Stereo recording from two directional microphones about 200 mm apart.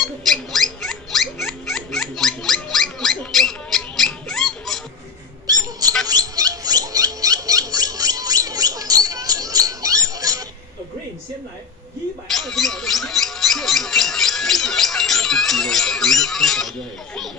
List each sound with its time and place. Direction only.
0.0 s rodents: centre (ahead or behind)
5.5 s rodents: 20° right (ahead or behind)
12.3 s a sound: centre (ahead or behind)